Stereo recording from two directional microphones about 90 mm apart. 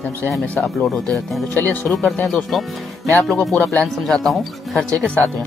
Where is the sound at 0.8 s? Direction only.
5° left (ahead or behind).